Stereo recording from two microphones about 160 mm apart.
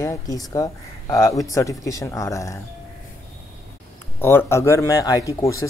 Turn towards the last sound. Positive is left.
turn(degrees=20)  # may be behind; listen again after turning